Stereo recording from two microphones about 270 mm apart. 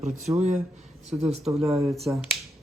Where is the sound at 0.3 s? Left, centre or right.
Right.